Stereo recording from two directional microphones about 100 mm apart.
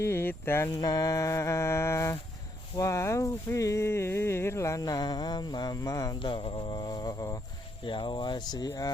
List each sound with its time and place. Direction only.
0.0 s speech: 25° left (ahead or behind)
0.7 s speech: 40° left (ahead or behind)
6.1 s speech: 60° left (ahead or behind); by 7.4 s 35° left (ahead or behind)
7.9 s speech: 55° left (ahead or behind)